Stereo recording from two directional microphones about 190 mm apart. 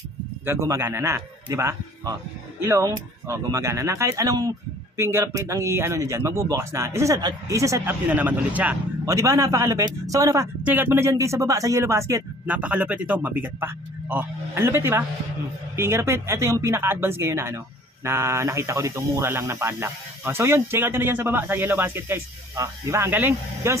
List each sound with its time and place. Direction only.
0.5 s speech: 15° right (ahead or behind)